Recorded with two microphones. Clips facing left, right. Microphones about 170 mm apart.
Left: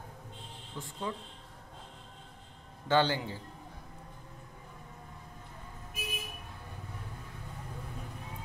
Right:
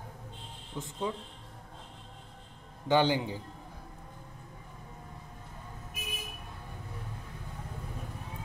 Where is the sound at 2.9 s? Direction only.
15° right (ahead or behind).